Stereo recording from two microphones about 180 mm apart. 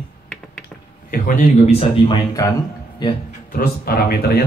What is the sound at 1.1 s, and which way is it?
Speech, 50° left (ahead or behind).